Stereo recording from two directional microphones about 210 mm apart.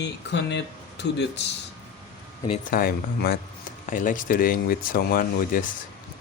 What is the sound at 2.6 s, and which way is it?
Speech, 45° left (ahead or behind).